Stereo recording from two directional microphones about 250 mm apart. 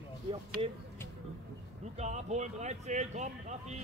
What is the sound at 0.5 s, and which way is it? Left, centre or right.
Speech, right.